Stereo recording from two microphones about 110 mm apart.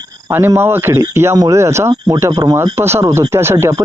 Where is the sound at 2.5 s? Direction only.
25° right (ahead or behind).